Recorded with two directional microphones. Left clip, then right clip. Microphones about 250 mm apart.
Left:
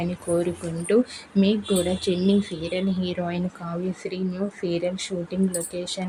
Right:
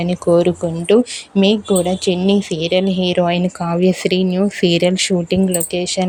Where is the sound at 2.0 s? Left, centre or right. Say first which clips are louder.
Right 7 dB; right.